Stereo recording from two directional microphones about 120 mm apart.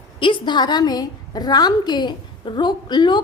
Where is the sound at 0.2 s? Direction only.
45° left (ahead or behind).